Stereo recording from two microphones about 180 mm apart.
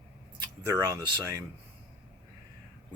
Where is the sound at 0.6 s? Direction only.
15° right (ahead or behind).